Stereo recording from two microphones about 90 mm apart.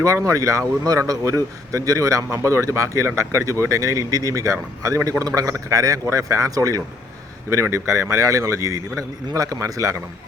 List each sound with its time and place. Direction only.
0.0 s a man's voice: 35° right (ahead or behind)